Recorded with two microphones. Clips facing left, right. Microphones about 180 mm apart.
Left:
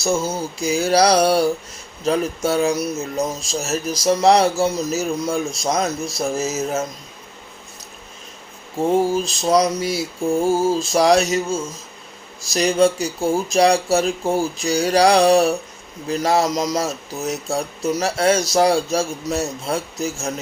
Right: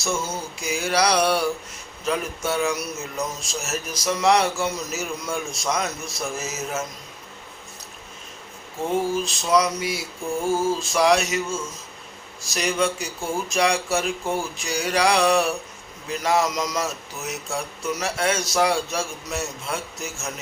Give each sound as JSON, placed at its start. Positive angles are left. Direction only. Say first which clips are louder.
{"t": 0.0, "sound": "speech", "louder": "left 6 dB", "side_deg": 35}
{"t": 8.9, "sound": "speech", "louder": "left 5 dB", "side_deg": 35}